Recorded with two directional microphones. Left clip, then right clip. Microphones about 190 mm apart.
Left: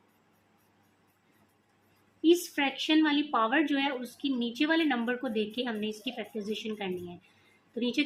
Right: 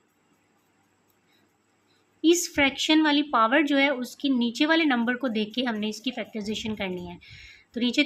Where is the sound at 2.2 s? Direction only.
35° right (ahead or behind).